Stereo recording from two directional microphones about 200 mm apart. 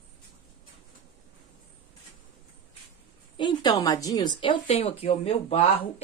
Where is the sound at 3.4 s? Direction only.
25° left (ahead or behind).